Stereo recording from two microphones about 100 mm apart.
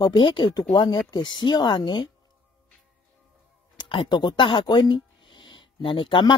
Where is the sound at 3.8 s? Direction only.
55° left (ahead or behind).